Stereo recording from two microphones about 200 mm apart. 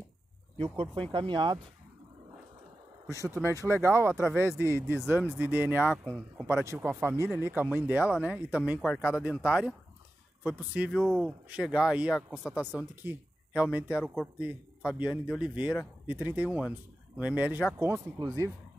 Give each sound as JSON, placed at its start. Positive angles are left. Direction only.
{"t": 0.6, "sound": "speech", "side_deg": -25}
{"t": 3.1, "sound": "speech", "side_deg": -15}
{"t": 6.0, "sound": "speech", "side_deg": 0}
{"t": 6.4, "sound": "speech", "side_deg": -15}